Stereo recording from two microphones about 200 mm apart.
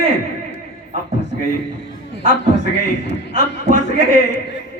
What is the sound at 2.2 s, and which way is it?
Speech, 60° left (ahead or behind).